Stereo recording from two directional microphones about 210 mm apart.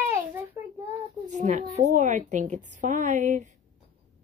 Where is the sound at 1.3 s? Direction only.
35° right (ahead or behind).